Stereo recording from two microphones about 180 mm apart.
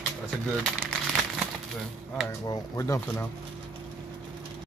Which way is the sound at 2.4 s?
20° left (ahead or behind).